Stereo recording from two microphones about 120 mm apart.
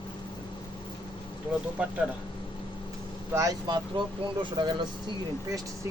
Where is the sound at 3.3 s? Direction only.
25° right (ahead or behind).